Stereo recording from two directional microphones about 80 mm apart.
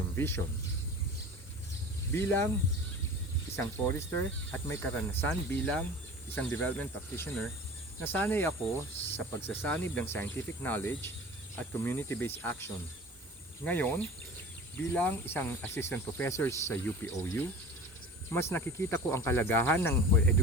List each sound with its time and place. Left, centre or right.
0.2 s speech: left
2.1 s speech: left
3.5 s speech: left